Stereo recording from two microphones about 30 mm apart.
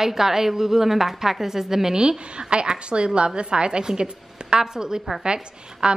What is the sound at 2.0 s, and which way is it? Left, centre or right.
A woman's voice, right.